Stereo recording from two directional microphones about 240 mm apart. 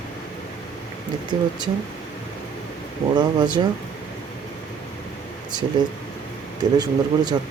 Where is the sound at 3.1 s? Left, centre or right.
Centre.